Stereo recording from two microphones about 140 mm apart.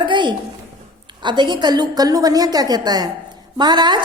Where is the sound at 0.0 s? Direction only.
35° right (ahead or behind).